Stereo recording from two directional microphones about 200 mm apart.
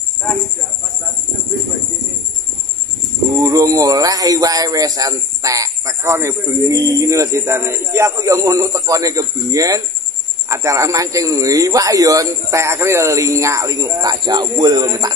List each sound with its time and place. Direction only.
3.3 s speech: 15° right (ahead or behind)